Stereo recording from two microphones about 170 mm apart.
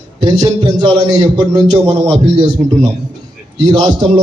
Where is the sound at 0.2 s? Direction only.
25° right (ahead or behind).